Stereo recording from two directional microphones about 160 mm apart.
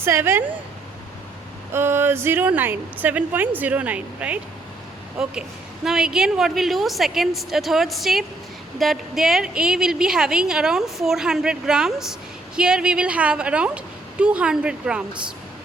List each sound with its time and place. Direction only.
0.0 s a woman's voice: 15° right (ahead or behind)
1.7 s a woman's voice: 15° right (ahead or behind)